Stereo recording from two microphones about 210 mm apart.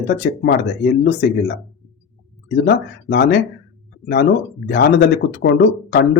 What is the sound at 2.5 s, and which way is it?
A man's voice, 50° left (ahead or behind).